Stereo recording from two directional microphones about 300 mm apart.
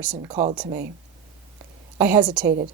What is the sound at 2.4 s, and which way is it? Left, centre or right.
Speech, right.